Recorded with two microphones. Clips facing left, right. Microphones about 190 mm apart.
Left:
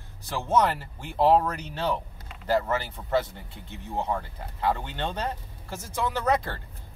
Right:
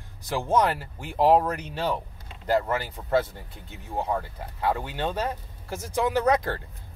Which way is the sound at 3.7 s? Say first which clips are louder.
Right 1 dB; 10° right (ahead or behind).